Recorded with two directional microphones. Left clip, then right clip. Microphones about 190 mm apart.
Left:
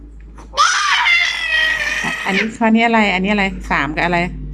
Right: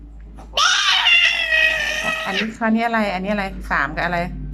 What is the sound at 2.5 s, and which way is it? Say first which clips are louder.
A woman's voice: left 7 dB; 15° left (ahead or behind).